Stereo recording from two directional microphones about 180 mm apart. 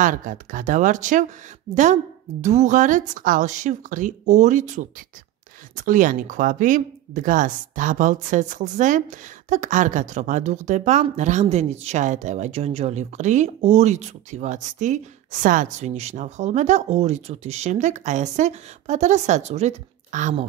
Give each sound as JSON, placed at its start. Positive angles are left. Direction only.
{"t": 0.0, "sound": "speech", "side_deg": -45}
{"t": 2.4, "sound": "speech", "side_deg": -40}